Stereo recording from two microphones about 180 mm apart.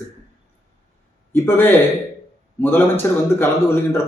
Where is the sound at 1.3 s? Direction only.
15° left (ahead or behind).